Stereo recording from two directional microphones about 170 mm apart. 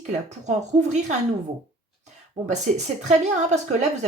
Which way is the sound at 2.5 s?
40° right (ahead or behind).